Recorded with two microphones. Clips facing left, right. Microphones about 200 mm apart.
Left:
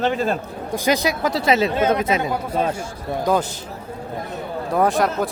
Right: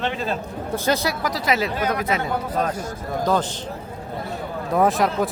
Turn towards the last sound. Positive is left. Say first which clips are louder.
# even
turn(degrees=0)  # may be behind; listen again after turning